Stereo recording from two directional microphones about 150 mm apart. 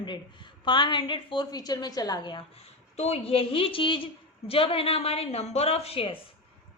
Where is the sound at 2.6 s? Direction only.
45° left (ahead or behind).